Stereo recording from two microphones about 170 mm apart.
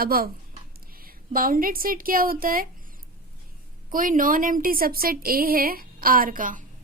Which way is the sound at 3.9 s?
55° right (ahead or behind).